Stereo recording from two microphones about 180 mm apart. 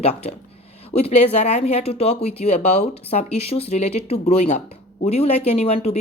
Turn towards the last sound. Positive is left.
turn(degrees=35)  # may be behind; listen again after turning